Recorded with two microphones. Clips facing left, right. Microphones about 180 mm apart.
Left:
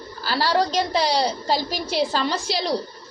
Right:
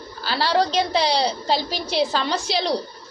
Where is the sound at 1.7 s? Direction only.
10° left (ahead or behind).